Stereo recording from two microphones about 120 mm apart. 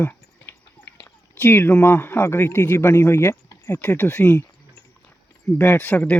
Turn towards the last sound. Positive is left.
turn(degrees=15)  # may be behind; listen again after turning